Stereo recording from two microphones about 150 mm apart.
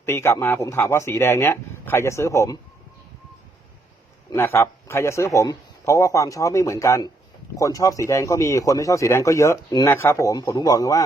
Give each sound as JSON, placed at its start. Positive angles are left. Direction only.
{"t": 0.0, "sound": "speech", "side_deg": 15}
{"t": 4.3, "sound": "speech", "side_deg": 15}